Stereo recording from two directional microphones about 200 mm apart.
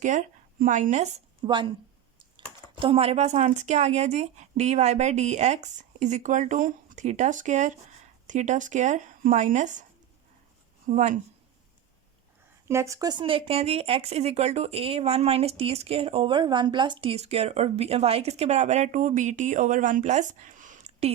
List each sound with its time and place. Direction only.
0.0 s a woman's voice: 40° right (ahead or behind)
10.8 s speech: 40° right (ahead or behind)
12.6 s speech: 15° right (ahead or behind); by 21.1 s 35° right (ahead or behind)